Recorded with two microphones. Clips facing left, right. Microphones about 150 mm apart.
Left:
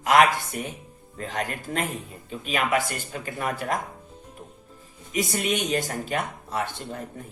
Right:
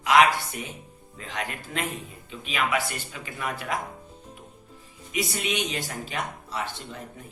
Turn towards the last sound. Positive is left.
turn(degrees=50)  # may be behind; listen again after turning